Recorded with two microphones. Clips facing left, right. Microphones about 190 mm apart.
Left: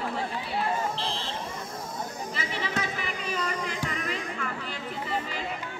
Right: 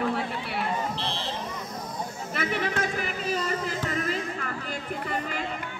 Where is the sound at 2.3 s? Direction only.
55° right (ahead or behind).